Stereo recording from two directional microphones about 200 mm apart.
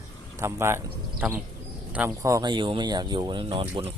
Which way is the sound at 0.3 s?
10° right (ahead or behind).